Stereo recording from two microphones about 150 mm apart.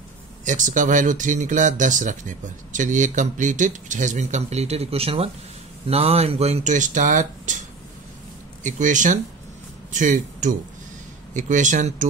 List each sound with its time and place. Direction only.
0.5 s speech: 55° right (ahead or behind)
8.6 s speech: 55° right (ahead or behind)